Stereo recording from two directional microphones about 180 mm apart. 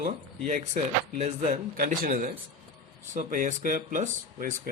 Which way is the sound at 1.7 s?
55° right (ahead or behind).